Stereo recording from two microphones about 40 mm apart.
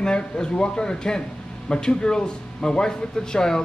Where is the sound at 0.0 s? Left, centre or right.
Left.